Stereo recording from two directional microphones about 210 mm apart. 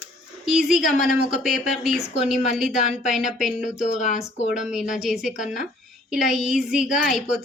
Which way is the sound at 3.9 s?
35° left (ahead or behind).